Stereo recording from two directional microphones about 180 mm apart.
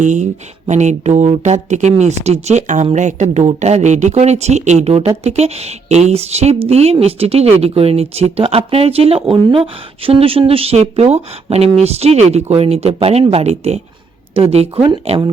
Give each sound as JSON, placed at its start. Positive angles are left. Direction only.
{"t": 0.0, "sound": "speech", "side_deg": -40}